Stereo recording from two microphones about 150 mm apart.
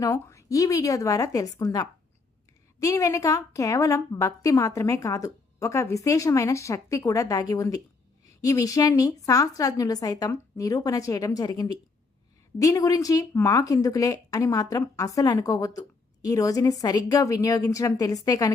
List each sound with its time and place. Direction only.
0.0 s speech: 20° left (ahead or behind)